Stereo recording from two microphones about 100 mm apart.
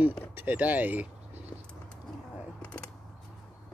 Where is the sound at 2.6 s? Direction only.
10° left (ahead or behind).